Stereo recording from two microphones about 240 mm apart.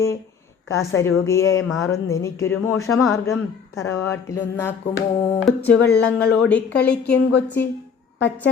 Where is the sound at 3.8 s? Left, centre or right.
Centre.